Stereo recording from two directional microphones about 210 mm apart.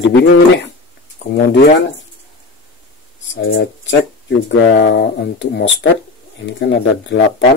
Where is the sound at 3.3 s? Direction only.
60° left (ahead or behind).